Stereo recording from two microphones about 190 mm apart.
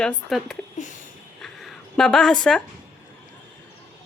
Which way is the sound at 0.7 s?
40° left (ahead or behind).